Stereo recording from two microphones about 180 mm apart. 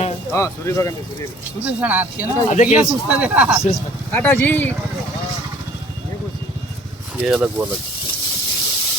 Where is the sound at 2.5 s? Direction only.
45° left (ahead or behind).